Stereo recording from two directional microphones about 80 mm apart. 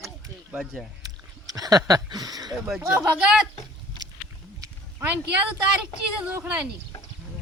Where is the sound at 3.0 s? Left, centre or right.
Centre.